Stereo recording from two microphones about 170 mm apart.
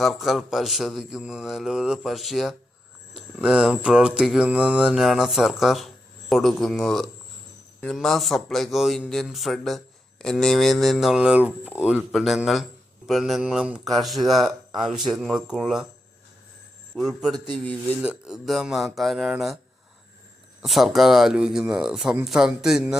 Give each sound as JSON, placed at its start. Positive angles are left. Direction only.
{"t": 0.0, "sound": "a man's voice", "side_deg": 0}
{"t": 16.9, "sound": "a man's voice", "side_deg": 0}
{"t": 17.3, "sound": "speech", "side_deg": -25}
{"t": 18.0, "sound": "a man's voice", "side_deg": -5}
{"t": 20.6, "sound": "a man's voice", "side_deg": 0}